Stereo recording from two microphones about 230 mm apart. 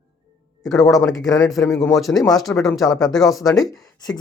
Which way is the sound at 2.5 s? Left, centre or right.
Centre.